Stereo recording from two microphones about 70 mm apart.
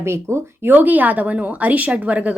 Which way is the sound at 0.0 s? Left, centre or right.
Right.